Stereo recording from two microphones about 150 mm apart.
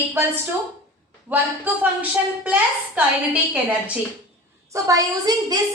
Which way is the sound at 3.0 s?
10° right (ahead or behind).